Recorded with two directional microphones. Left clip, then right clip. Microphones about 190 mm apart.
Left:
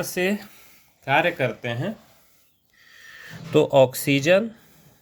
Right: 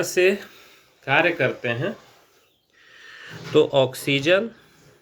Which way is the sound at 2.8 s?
50° left (ahead or behind).